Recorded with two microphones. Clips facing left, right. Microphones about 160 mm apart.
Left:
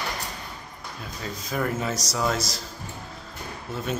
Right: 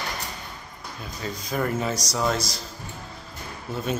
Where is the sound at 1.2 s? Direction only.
Centre (ahead or behind).